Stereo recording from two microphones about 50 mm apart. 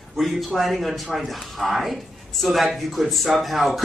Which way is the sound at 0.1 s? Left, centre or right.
Centre.